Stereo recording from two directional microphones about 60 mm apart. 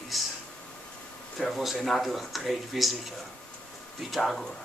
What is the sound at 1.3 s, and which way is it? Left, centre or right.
Speech, centre.